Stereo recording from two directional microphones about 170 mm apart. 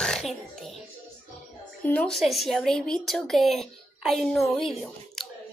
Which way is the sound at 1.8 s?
5° left (ahead or behind).